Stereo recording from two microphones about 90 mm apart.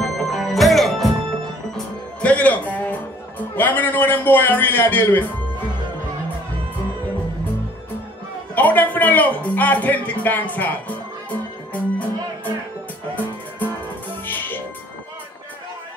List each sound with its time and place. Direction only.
0.0 s music: centre (ahead or behind)
2.2 s music: 15° left (ahead or behind)
8.5 s speech: 20° left (ahead or behind)
14.2 s music: 20° left (ahead or behind)